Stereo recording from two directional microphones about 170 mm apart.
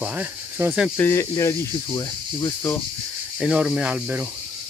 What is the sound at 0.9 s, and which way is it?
Speech, 15° left (ahead or behind).